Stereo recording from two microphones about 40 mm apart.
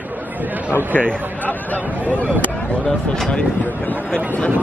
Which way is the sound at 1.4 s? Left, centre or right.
Left.